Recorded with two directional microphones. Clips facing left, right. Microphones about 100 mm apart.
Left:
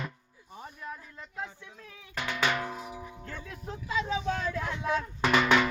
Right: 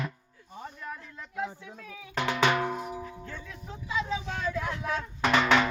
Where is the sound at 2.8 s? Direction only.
45° right (ahead or behind).